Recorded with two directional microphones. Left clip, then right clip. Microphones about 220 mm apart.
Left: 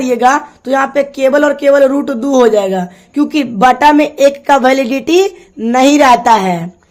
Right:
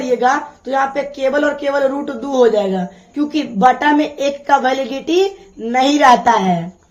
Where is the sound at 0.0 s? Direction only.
50° left (ahead or behind).